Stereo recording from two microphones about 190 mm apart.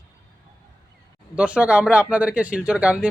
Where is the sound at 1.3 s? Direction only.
5° right (ahead or behind).